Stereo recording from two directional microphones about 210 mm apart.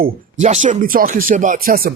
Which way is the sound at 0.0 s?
35° right (ahead or behind).